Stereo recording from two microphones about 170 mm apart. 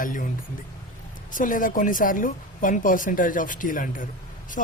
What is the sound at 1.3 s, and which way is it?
Speech, 50° left (ahead or behind).